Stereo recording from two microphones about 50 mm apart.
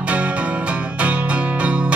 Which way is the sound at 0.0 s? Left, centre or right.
Right.